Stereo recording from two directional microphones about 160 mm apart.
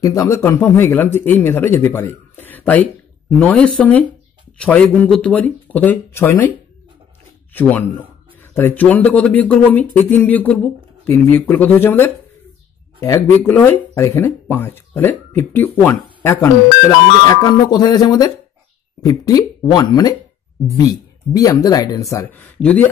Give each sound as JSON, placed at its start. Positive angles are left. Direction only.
{"t": 0.0, "sound": "speech", "side_deg": 20}
{"t": 7.5, "sound": "speech", "side_deg": 10}